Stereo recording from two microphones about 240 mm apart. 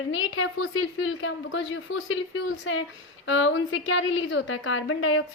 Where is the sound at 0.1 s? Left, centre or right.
Left.